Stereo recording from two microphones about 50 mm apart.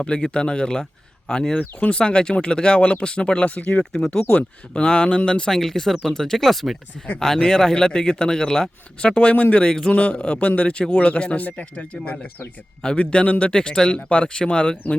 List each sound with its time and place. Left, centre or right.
0.0 s speech: centre
1.5 s speech: left
9.6 s speech: centre
9.9 s speech: left
11.3 s speech: left